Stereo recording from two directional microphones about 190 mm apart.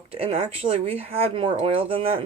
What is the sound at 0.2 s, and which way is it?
Speech, 30° right (ahead or behind).